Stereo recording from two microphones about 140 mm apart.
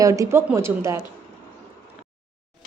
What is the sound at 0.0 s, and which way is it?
Speech, 25° right (ahead or behind).